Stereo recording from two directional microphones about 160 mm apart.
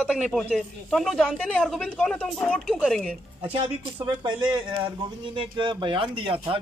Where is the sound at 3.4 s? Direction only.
30° right (ahead or behind).